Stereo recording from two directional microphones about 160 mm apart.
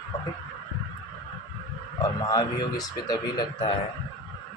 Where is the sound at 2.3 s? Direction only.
25° left (ahead or behind).